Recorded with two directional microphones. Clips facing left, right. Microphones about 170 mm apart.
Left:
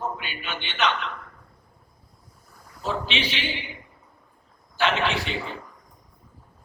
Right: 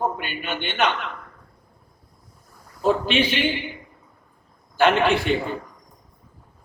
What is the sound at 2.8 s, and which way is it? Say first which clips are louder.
Speech: right 8 dB; 50° right (ahead or behind).